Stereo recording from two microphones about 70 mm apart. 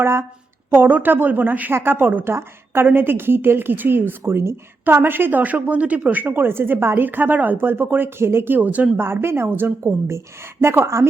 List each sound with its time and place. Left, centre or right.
0.0 s speech: right
0.7 s a woman's voice: right
9.0 s speech: right